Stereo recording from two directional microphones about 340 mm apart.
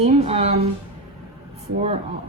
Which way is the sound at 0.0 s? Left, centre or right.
Centre.